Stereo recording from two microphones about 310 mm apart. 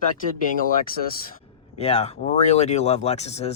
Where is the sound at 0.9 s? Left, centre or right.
Left.